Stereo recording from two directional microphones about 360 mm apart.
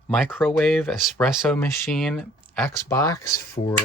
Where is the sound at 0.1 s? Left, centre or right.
Centre.